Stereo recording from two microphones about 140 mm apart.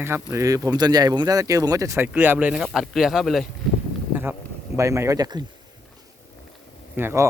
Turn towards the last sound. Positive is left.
turn(degrees=-15)  # may be behind; listen again after turning